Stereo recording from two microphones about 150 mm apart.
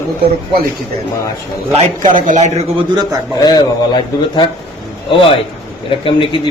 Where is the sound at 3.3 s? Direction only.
25° left (ahead or behind).